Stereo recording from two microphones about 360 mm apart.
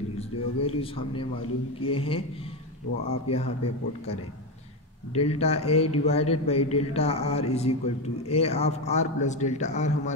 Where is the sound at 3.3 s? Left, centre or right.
Centre.